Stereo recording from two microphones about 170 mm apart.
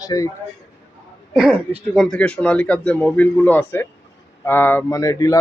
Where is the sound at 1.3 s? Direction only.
Centre (ahead or behind).